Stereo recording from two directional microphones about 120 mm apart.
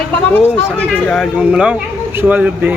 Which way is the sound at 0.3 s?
15° left (ahead or behind).